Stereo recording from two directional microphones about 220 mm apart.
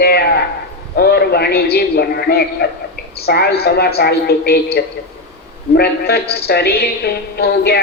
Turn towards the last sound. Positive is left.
turn(degrees=45)  # may be behind; listen again after turning